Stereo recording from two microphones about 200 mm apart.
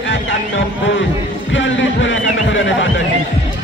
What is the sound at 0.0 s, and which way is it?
Music, 70° left (ahead or behind).